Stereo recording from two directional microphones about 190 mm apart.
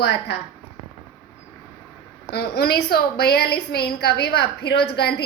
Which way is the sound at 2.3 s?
55° left (ahead or behind).